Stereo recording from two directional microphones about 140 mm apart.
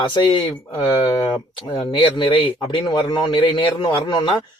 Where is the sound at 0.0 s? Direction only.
35° left (ahead or behind).